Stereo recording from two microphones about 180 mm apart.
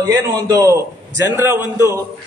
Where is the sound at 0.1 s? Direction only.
20° right (ahead or behind).